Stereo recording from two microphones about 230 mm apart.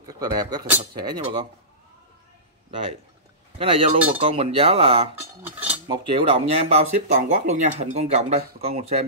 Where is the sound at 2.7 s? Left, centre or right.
Right.